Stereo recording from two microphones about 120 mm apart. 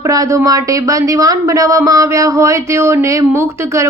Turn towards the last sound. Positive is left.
turn(degrees=-25)  # may be behind; listen again after turning